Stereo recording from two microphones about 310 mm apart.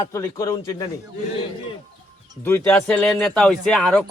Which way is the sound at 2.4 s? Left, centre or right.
Centre.